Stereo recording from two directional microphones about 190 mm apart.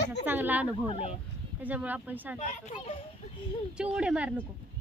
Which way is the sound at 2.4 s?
40° left (ahead or behind).